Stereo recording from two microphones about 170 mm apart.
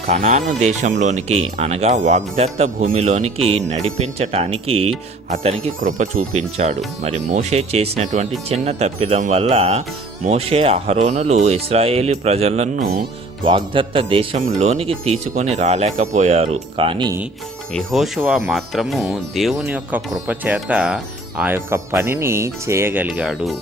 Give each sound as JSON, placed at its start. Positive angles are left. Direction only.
{"t": 0.1, "sound": "speech", "side_deg": -40}
{"t": 17.7, "sound": "speech", "side_deg": 0}